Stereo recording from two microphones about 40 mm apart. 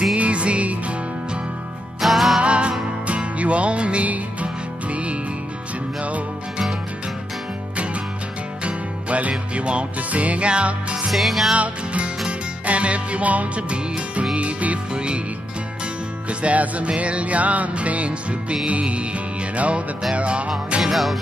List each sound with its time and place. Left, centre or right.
0.1 s music: right
2.0 s music: centre
2.4 s music: right
7.7 s music: right
11.1 s music: centre
11.5 s music: right
16.3 s music: right
20.8 s music: centre